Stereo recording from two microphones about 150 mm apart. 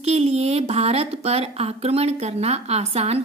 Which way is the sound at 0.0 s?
45° right (ahead or behind).